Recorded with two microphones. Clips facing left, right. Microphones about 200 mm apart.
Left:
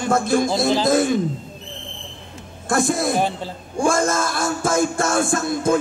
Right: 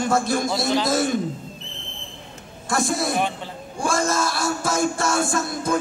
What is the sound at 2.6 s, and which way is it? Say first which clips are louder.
Music: left 4 dB; 50° left (ahead or behind).